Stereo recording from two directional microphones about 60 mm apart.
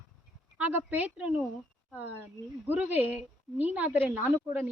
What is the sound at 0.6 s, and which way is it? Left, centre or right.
Speech, right.